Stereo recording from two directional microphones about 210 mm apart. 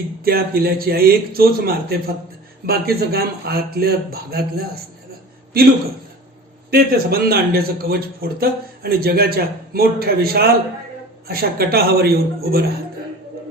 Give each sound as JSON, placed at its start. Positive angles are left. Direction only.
{"t": 0.3, "sound": "a man's voice", "side_deg": -45}
{"t": 6.7, "sound": "a man's voice", "side_deg": -45}